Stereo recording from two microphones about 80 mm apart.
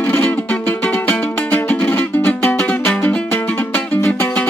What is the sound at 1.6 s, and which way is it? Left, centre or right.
Music, left.